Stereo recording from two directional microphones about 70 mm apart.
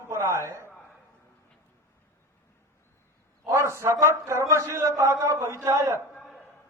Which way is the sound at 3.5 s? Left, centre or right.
Right.